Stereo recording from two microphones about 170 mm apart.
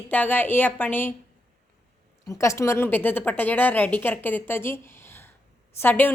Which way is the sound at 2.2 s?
15° left (ahead or behind).